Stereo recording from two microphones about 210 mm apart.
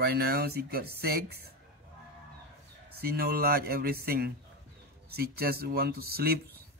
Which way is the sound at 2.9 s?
50° right (ahead or behind).